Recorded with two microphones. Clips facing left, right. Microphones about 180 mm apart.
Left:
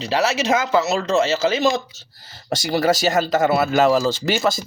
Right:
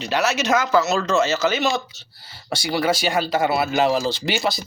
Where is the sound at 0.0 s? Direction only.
30° left (ahead or behind).